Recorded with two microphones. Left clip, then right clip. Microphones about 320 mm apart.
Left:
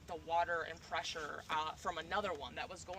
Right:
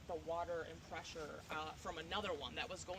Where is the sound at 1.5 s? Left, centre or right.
Left; by 2.7 s centre.